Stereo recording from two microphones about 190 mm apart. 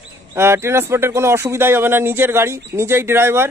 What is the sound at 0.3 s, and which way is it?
A man's voice, 15° right (ahead or behind).